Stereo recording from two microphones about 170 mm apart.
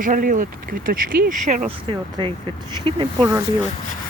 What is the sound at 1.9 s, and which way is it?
Speech, 30° right (ahead or behind).